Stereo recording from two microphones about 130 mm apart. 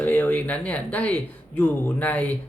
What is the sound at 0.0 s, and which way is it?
Speech, 10° left (ahead or behind).